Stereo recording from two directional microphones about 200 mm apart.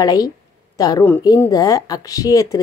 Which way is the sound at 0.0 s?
20° left (ahead or behind).